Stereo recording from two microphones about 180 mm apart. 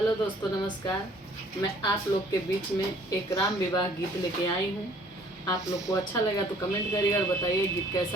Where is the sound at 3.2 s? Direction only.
15° left (ahead or behind).